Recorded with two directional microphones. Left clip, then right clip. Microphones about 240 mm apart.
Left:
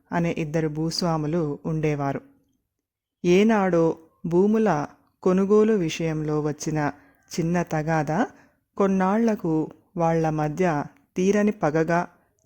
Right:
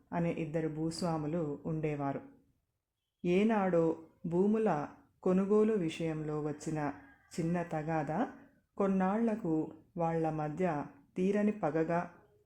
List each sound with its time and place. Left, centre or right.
0.1 s speech: left
3.2 s speech: left